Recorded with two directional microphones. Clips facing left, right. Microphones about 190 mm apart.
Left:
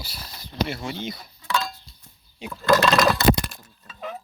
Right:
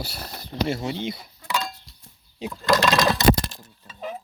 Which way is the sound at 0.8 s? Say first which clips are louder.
Right 3 dB; 25° right (ahead or behind).